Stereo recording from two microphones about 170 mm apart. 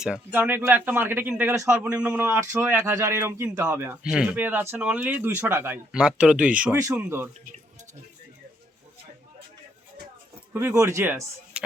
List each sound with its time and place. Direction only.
0.0 s speech: 10° right (ahead or behind)
6.7 s speech: 20° right (ahead or behind)
10.5 s speech: 15° right (ahead or behind)